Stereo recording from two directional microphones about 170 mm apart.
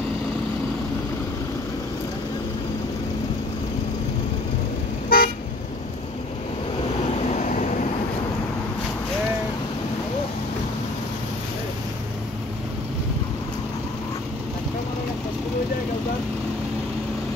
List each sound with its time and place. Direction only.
5.1 s car: 60° left (ahead or behind)
7.2 s vehicle: 45° left (ahead or behind)